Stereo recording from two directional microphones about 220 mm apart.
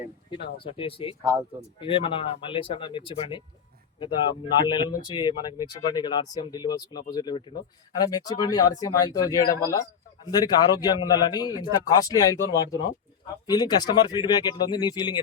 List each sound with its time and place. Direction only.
0.6 s speech: 25° left (ahead or behind)
1.2 s speech: 15° right (ahead or behind)
1.8 s speech: 25° left (ahead or behind)